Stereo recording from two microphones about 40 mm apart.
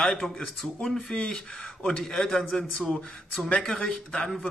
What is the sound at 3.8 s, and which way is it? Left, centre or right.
Speech, left.